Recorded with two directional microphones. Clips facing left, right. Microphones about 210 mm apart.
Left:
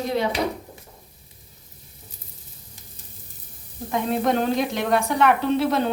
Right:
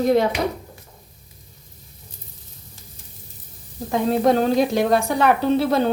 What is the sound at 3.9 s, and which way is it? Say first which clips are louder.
Speech: right 4 dB; 35° right (ahead or behind).